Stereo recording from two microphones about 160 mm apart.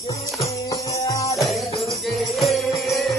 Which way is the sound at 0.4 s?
20° left (ahead or behind).